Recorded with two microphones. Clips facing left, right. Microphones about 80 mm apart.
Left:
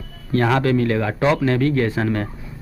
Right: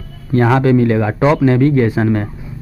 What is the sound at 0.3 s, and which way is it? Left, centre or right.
Speech, centre.